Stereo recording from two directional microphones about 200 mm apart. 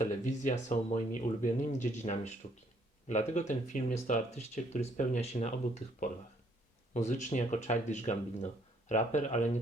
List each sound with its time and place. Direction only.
0.0 s speech: 40° left (ahead or behind)
6.9 s speech: 35° left (ahead or behind)